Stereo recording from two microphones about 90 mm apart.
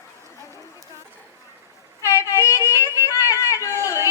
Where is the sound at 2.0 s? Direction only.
30° left (ahead or behind).